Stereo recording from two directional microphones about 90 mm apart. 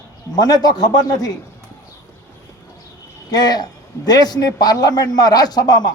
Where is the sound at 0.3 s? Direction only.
45° left (ahead or behind).